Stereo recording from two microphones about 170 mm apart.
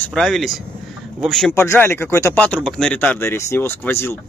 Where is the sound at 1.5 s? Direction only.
15° left (ahead or behind).